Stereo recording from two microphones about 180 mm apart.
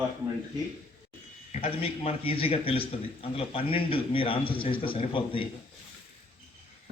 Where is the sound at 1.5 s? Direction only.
30° left (ahead or behind).